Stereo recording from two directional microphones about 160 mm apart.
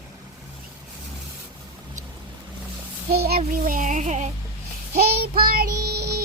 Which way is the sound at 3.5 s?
60° right (ahead or behind).